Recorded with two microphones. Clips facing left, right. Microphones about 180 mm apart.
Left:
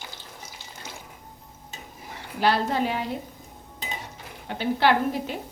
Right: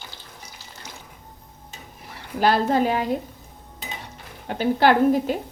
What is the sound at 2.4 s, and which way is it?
Speech, 45° right (ahead or behind).